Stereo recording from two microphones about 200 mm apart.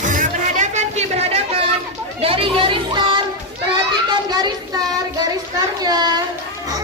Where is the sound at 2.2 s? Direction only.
25° right (ahead or behind).